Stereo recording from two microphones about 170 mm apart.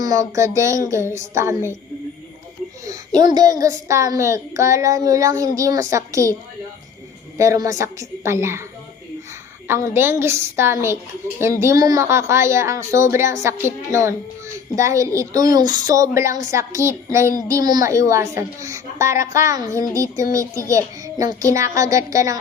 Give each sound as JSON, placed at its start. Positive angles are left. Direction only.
{"t": 0.0, "sound": "a woman's voice", "side_deg": -20}
{"t": 2.8, "sound": "a child's voice", "side_deg": -20}
{"t": 7.3, "sound": "a woman's voice", "side_deg": -20}
{"t": 9.6, "sound": "a woman's voice", "side_deg": -15}